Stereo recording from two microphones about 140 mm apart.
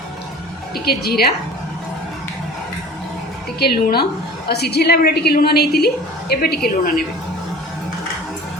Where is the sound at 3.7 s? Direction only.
90° left.